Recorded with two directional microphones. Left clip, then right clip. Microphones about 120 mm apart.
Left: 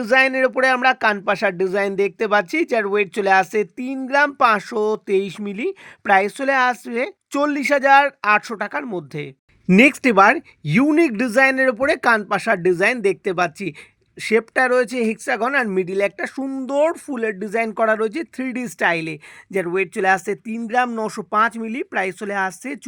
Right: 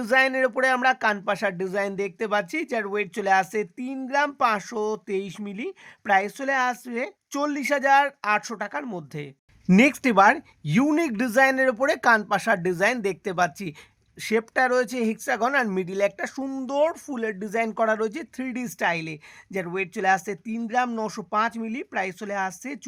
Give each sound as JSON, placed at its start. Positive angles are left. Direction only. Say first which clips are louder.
{"t": 0.0, "sound": "speech", "louder": "left 5 dB", "side_deg": 30}
{"t": 16.7, "sound": "speech", "louder": "left 5 dB", "side_deg": 30}